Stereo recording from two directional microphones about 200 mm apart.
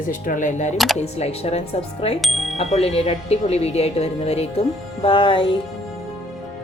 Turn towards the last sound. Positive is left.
turn(degrees=25)  # may be behind; listen again after turning